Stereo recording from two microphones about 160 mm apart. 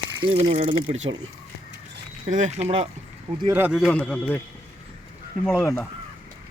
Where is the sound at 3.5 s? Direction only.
10° right (ahead or behind).